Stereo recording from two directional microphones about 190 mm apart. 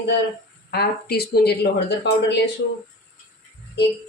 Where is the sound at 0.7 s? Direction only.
55° left (ahead or behind).